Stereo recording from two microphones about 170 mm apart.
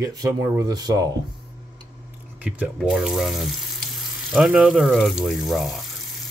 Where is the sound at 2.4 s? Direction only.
5° right (ahead or behind).